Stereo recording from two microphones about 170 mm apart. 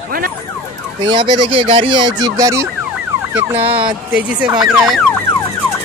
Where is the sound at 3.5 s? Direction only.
35° right (ahead or behind).